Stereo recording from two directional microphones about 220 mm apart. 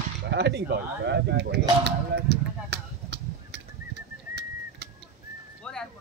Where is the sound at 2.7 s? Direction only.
50° right (ahead or behind).